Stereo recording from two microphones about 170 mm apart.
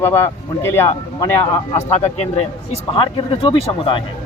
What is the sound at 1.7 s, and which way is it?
Speech, 35° left (ahead or behind).